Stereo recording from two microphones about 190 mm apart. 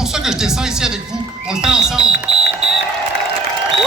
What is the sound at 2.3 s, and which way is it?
Music, 30° right (ahead or behind).